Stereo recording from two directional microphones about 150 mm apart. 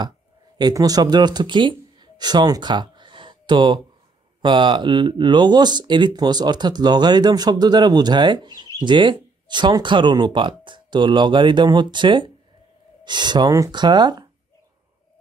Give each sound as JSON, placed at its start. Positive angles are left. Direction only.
{"t": 0.6, "sound": "speech", "side_deg": -25}